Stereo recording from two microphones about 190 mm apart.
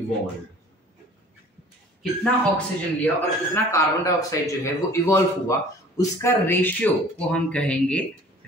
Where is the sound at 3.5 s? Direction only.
15° left (ahead or behind).